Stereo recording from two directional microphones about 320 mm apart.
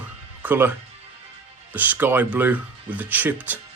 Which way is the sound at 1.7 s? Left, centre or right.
Centre.